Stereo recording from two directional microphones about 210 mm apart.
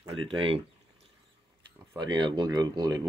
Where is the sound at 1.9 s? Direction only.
20° right (ahead or behind).